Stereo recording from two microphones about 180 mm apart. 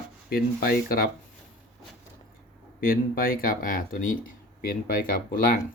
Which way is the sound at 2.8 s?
50° left (ahead or behind).